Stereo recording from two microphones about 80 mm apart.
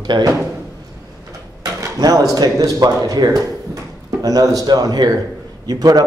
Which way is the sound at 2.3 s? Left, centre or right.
Right.